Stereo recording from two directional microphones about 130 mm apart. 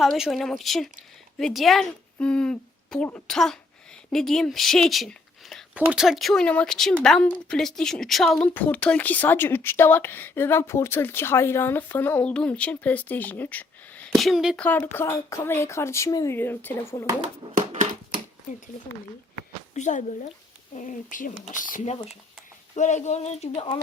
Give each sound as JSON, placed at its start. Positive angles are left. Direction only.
{"t": 0.0, "sound": "speech", "side_deg": 0}
{"t": 5.7, "sound": "speech", "side_deg": -10}
{"t": 8.5, "sound": "speech", "side_deg": 10}
{"t": 14.1, "sound": "speech", "side_deg": 0}
{"t": 14.6, "sound": "speech", "side_deg": 15}
{"t": 17.4, "sound": "speech", "side_deg": -45}
{"t": 19.7, "sound": "speech", "side_deg": 70}
{"t": 20.7, "sound": "speech", "side_deg": 80}
{"t": 22.7, "sound": "speech", "side_deg": 65}